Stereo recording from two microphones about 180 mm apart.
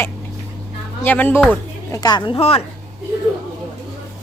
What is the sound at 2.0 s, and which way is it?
Speech, 25° left (ahead or behind).